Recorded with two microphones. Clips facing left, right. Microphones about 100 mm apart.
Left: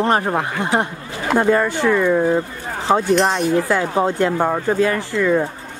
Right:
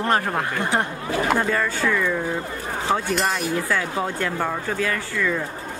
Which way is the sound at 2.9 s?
35° left (ahead or behind).